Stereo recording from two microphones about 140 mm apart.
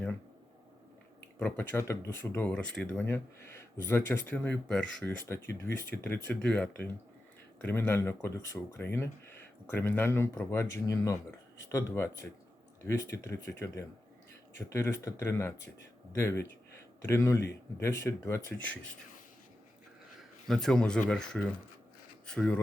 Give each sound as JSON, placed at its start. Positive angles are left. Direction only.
{"t": 1.4, "sound": "speech", "side_deg": 10}
{"t": 20.5, "sound": "speech", "side_deg": 5}